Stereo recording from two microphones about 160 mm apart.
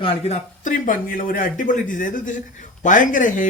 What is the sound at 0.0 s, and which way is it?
Speech, 40° left (ahead or behind).